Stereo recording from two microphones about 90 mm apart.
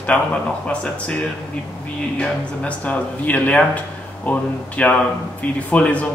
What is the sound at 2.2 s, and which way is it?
Speech, 15° left (ahead or behind).